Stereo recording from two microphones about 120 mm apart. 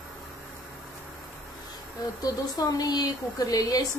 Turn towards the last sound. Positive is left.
turn(degrees=30)  # may be behind; listen again after turning